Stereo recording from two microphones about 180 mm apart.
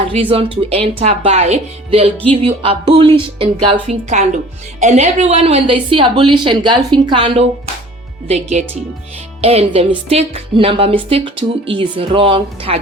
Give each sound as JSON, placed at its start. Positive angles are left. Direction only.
{"t": 0.1, "sound": "a woman's voice", "side_deg": -30}